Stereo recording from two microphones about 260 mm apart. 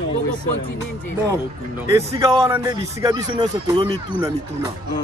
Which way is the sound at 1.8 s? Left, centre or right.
Centre.